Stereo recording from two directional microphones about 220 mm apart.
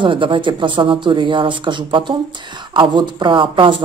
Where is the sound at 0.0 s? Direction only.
20° right (ahead or behind).